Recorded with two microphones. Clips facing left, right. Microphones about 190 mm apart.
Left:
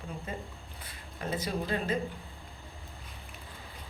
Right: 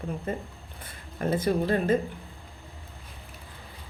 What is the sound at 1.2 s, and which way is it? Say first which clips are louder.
Speech: right 9 dB; 55° right (ahead or behind).